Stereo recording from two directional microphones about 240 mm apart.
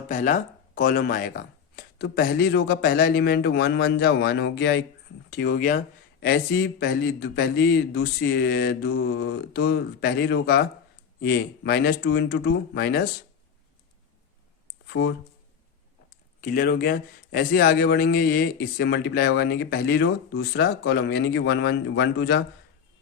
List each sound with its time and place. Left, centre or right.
0.1 s a man's voice: left
16.4 s a man's voice: left